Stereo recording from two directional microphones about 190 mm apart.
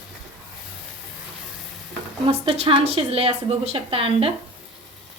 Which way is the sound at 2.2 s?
35° right (ahead or behind).